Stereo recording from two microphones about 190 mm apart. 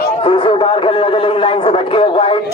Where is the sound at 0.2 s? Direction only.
30° left (ahead or behind).